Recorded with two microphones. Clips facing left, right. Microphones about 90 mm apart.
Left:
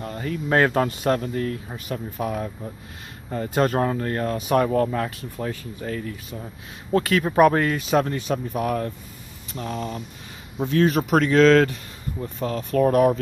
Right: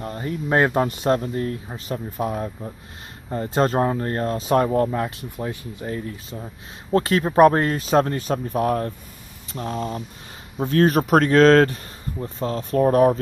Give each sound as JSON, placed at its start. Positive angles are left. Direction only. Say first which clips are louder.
{"t": 0.0, "sound": "speech", "louder": "right 1 dB", "side_deg": -25}
{"t": 4.9, "sound": "speech", "louder": "right 1 dB", "side_deg": -20}
{"t": 10.7, "sound": "speech", "louder": "right 2 dB", "side_deg": -45}